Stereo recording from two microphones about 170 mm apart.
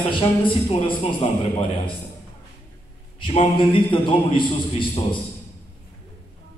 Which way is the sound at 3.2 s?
30° left (ahead or behind).